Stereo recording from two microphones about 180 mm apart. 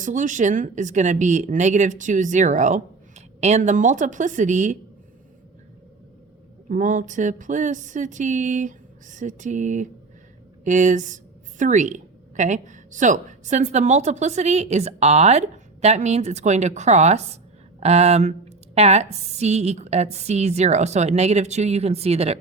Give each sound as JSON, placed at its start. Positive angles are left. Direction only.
{"t": 0.0, "sound": "speech", "side_deg": -45}
{"t": 6.7, "sound": "a woman's voice", "side_deg": -45}